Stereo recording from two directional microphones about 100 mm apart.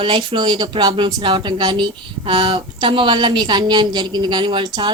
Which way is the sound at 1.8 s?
60° right (ahead or behind).